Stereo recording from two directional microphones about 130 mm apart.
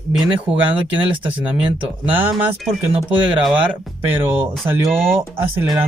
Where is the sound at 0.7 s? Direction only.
15° right (ahead or behind).